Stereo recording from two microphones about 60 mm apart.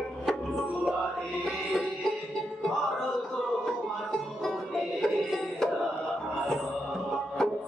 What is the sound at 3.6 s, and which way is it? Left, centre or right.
Music, centre.